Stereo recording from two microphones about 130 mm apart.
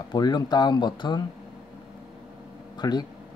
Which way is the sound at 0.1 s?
30° left (ahead or behind).